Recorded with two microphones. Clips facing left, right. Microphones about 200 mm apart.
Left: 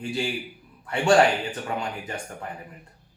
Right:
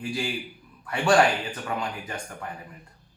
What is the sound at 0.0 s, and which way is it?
A man's voice, 25° left (ahead or behind).